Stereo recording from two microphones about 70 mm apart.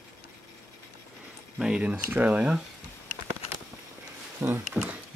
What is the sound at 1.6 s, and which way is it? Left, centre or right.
Speech, centre.